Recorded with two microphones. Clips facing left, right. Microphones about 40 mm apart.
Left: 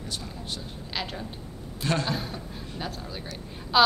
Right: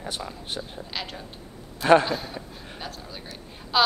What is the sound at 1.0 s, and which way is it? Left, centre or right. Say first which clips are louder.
A woman's voice: left 3 dB; centre.